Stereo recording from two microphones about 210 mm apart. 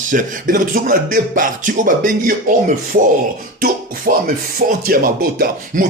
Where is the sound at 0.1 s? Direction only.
40° right (ahead or behind).